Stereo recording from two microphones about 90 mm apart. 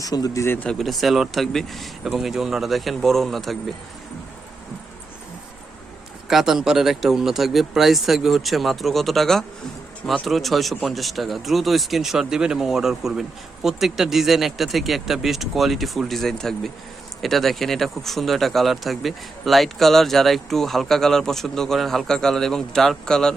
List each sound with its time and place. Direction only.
0.0 s speech: 40° left (ahead or behind)
0.6 s speech: 5° left (ahead or behind)
6.2 s speech: 5° right (ahead or behind)